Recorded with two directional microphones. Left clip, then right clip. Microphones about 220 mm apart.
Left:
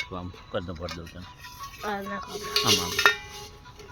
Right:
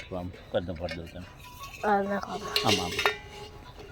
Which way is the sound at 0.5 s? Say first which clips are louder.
Right 2 dB; 25° left (ahead or behind).